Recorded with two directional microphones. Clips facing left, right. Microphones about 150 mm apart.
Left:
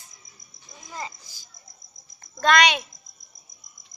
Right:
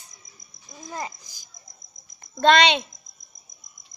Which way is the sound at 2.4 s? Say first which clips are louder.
Right 2 dB; 25° right (ahead or behind).